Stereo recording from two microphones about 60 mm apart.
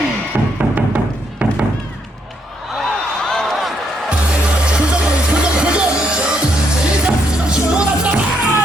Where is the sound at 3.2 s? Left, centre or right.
Centre.